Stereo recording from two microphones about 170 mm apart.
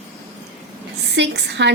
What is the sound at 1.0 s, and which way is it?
Speech, 90° right.